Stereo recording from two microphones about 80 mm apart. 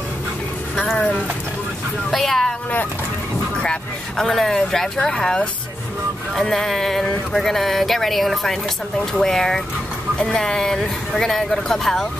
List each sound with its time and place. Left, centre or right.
0.9 s speech: centre
2.0 s speech: centre
4.2 s speech: centre